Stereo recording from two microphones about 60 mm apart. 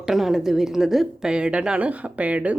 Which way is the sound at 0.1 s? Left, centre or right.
Centre.